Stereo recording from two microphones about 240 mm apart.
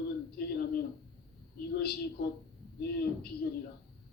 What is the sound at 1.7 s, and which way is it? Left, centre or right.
A man's voice, left.